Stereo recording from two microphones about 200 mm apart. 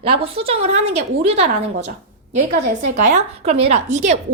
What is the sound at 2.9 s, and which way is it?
A woman's voice, 35° right (ahead or behind).